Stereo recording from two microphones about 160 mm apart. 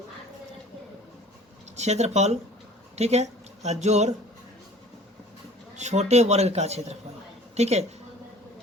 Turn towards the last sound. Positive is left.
turn(degrees=-45)  # may be behind; listen again after turning